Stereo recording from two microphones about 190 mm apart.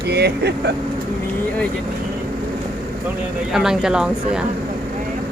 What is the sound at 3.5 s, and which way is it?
Speech, 5° right (ahead or behind).